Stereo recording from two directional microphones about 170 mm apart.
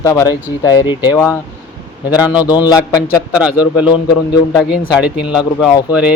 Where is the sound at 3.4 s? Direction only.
10° right (ahead or behind).